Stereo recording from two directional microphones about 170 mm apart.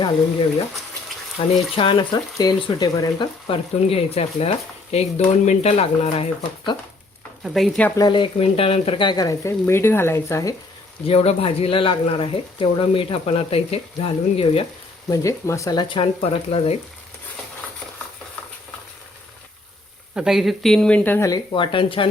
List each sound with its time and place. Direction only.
1.4 s speech: 30° left (ahead or behind)
3.4 s speech: 35° left (ahead or behind)
7.4 s speech: centre (ahead or behind)
7.9 s speech: 25° left (ahead or behind)
11.0 s speech: 35° left (ahead or behind)
15.1 s speech: 20° left (ahead or behind); by 16.7 s 35° left (ahead or behind)
20.1 s speech: centre (ahead or behind); by 22.1 s 30° left (ahead or behind)